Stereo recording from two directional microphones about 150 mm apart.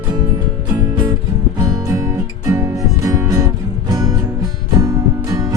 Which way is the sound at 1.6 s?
25° right (ahead or behind).